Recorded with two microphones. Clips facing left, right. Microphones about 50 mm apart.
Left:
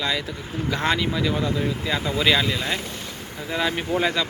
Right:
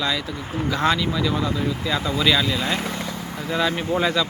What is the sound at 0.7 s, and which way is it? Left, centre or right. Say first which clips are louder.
Speech: right 2 dB; centre.